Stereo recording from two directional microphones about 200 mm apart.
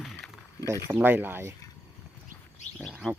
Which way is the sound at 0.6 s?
15° right (ahead or behind).